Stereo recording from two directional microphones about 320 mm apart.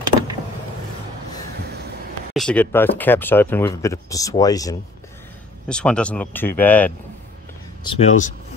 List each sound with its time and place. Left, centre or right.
2.3 s speech: centre
7.8 s speech: centre